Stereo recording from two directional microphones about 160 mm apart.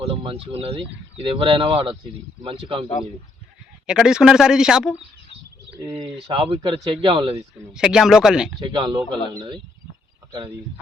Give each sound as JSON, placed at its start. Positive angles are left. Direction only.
{"t": 0.0, "sound": "speech", "side_deg": -35}
{"t": 3.8, "sound": "speech", "side_deg": -5}
{"t": 5.8, "sound": "a man's voice", "side_deg": -20}
{"t": 6.2, "sound": "speech", "side_deg": -30}
{"t": 7.7, "sound": "speech", "side_deg": -5}
{"t": 8.5, "sound": "a man's voice", "side_deg": -30}